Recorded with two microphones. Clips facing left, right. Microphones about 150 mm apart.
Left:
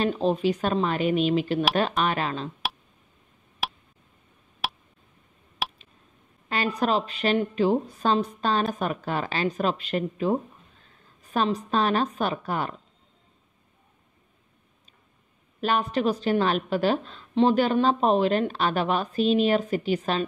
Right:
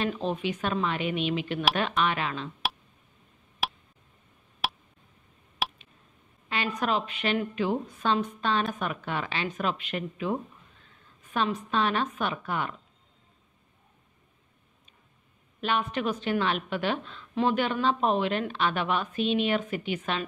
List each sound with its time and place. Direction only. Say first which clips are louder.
0.0 s a woman's voice: left 6 dB; 35° left (ahead or behind)
3.6 s tick: even; centre (ahead or behind)
4.6 s a sound: even; centre (ahead or behind)
6.8 s a woman's voice: left 4 dB; 35° left (ahead or behind)
15.6 s a woman's voice: left 4 dB; 35° left (ahead or behind)